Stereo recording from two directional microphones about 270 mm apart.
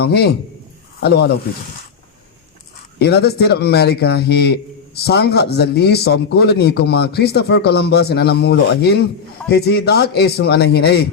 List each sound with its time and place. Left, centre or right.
0.0 s a man's voice: left
3.0 s a man's voice: left